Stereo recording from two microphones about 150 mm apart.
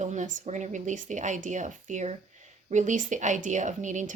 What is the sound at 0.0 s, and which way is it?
Speech, 55° right (ahead or behind).